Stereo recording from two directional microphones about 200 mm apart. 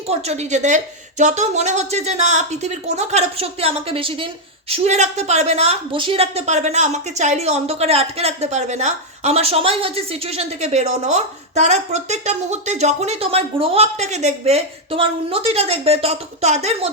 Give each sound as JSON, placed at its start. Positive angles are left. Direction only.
{"t": 0.1, "sound": "a woman's voice", "side_deg": -35}